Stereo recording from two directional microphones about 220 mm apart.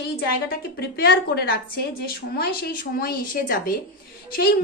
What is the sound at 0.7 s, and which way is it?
A woman's voice, 45° left (ahead or behind).